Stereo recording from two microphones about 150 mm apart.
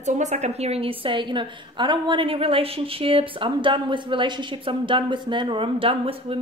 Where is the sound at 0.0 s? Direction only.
50° right (ahead or behind).